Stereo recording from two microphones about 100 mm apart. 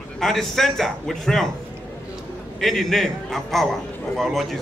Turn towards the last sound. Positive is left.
turn(degrees=0)  # may be behind; listen again after turning